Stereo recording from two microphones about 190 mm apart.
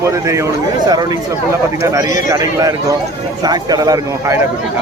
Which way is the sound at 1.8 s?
20° right (ahead or behind).